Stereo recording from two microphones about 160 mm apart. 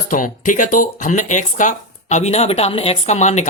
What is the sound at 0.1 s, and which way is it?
Speech, 55° left (ahead or behind).